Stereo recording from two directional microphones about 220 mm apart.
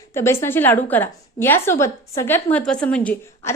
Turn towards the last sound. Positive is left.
turn(degrees=5)  # may be behind; listen again after turning